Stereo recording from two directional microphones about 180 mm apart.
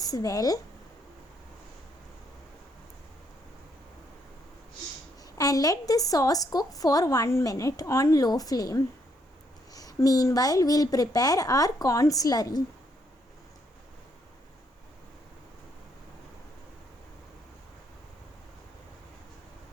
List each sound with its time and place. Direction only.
0.0 s speech: 20° left (ahead or behind)
5.4 s a woman's voice: 20° left (ahead or behind)